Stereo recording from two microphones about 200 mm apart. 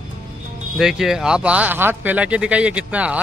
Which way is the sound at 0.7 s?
Centre (ahead or behind).